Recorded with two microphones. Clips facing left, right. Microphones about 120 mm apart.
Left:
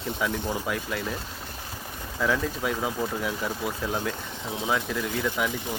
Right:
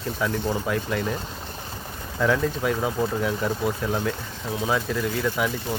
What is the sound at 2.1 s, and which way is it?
Speech, centre (ahead or behind).